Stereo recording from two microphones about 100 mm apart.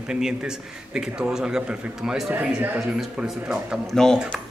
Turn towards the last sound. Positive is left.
turn(degrees=5)  # may be behind; listen again after turning